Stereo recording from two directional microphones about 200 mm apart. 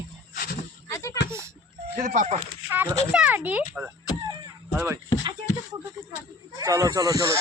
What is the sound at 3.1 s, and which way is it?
Speech, 5° right (ahead or behind).